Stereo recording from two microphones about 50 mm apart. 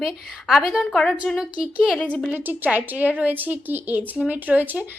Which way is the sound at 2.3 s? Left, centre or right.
Right.